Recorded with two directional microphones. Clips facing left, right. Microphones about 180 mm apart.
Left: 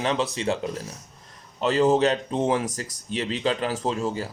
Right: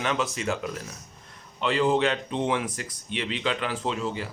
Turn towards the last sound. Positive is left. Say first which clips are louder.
# left 3 dB
turn(degrees=40)  # may be behind; listen again after turning